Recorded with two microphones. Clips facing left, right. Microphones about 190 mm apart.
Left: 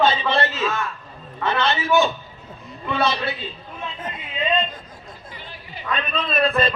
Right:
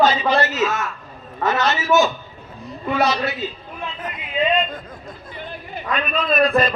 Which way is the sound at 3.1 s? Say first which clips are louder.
Right 3 dB; 30° left (ahead or behind).